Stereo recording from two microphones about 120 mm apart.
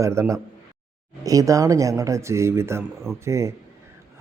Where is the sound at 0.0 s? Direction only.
25° right (ahead or behind).